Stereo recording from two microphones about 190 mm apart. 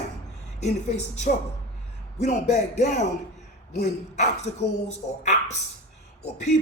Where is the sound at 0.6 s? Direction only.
35° left (ahead or behind).